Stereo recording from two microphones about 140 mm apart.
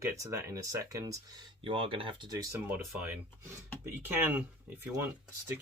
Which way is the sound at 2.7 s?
15° right (ahead or behind).